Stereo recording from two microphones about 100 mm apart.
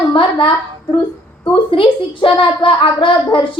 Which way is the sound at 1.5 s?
60° left (ahead or behind).